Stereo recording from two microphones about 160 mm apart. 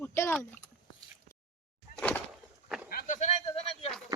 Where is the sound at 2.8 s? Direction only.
60° left (ahead or behind); by 3.9 s 40° left (ahead or behind).